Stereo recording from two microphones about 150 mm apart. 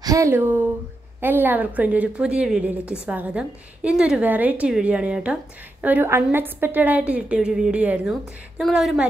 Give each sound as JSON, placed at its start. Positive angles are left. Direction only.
{"t": 0.0, "sound": "a woman's voice", "side_deg": -20}